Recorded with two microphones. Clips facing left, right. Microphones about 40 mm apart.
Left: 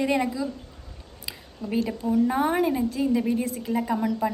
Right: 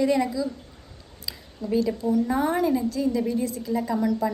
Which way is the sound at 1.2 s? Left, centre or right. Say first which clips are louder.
Right 3 dB; left.